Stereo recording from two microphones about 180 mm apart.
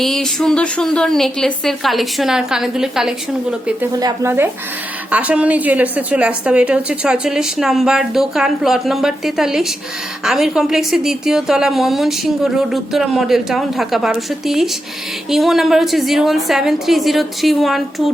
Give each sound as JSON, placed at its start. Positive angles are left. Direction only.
{"t": 0.0, "sound": "a woman's voice", "side_deg": 0}
{"t": 4.0, "sound": "a woman's voice", "side_deg": -15}